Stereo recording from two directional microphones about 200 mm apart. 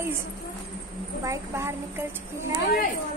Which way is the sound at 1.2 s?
15° right (ahead or behind).